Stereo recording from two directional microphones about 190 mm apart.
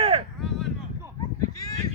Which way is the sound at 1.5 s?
20° left (ahead or behind).